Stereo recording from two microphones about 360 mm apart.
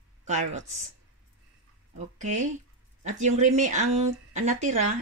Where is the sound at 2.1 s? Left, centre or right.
Right.